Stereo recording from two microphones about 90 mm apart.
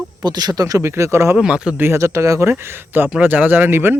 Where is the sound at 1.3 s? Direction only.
10° right (ahead or behind).